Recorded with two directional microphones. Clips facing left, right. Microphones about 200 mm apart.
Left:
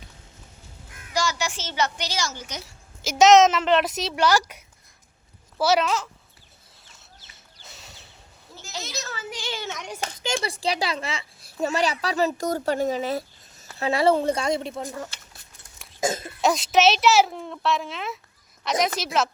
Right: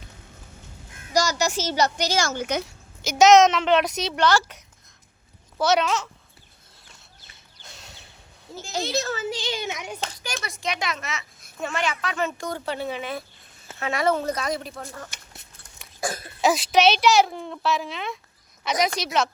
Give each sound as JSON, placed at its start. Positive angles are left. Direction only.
{"t": 1.1, "sound": "a woman's voice", "side_deg": -40}
{"t": 2.6, "sound": "a woman's voice", "side_deg": 0}
{"t": 7.6, "sound": "a sound", "side_deg": 0}
{"t": 8.5, "sound": "a woman's voice", "side_deg": -35}
{"t": 9.1, "sound": "speech", "side_deg": -25}
{"t": 10.2, "sound": "a child's voice", "side_deg": 30}
{"t": 16.4, "sound": "a woman's voice", "side_deg": 0}